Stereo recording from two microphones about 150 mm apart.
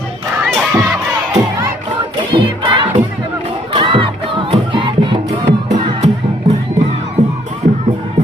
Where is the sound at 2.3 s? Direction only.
35° right (ahead or behind).